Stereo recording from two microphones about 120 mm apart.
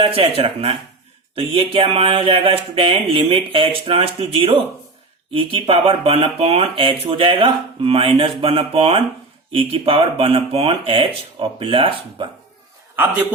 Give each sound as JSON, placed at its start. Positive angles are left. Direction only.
{"t": 0.0, "sound": "speech", "side_deg": -50}